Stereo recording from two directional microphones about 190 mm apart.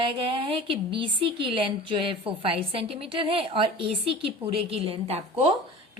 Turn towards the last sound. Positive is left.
turn(degrees=-35)  # may be behind; listen again after turning